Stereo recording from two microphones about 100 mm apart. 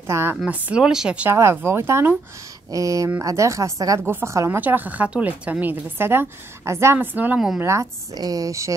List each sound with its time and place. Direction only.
0.0 s a woman's voice: 25° right (ahead or behind)
0.5 s a woman's voice: 10° right (ahead or behind)
1.3 s a woman's voice: 25° right (ahead or behind)
4.6 s a woman's voice: 15° right (ahead or behind)
7.3 s a woman's voice: 5° right (ahead or behind)
7.6 s a woman's voice: 30° right (ahead or behind)